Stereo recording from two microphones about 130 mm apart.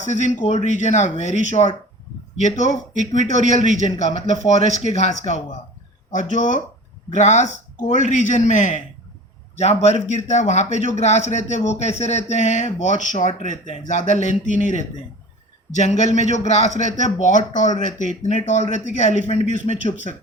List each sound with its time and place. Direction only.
0.0 s a man's voice: 65° left (ahead or behind)
9.6 s a man's voice: 55° left (ahead or behind)
19.8 s a man's voice: 70° left (ahead or behind)